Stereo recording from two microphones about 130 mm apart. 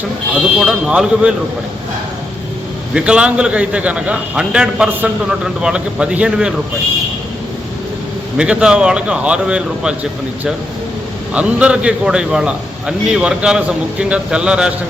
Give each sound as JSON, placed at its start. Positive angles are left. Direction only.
{"t": 0.6, "sound": "a man's voice", "side_deg": -5}
{"t": 2.9, "sound": "a man's voice", "side_deg": -10}
{"t": 8.4, "sound": "a man's voice", "side_deg": -5}